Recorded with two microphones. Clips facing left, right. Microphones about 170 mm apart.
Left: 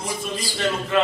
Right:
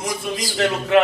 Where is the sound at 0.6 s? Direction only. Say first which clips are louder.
Right 5 dB; 65° right (ahead or behind).